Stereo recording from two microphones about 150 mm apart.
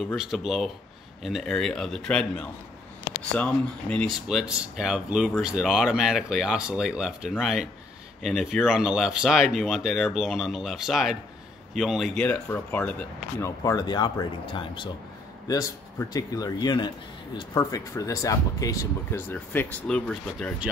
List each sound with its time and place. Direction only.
0.0 s speech: centre (ahead or behind)
3.3 s speech: 10° left (ahead or behind)
4.3 s speech: 5° right (ahead or behind)
12.2 s speech: 10° left (ahead or behind)
13.4 s speech: 25° left (ahead or behind); by 20.5 s 5° left (ahead or behind)